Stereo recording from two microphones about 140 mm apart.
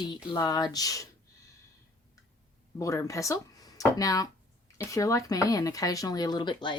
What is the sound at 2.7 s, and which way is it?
Speech, 20° left (ahead or behind).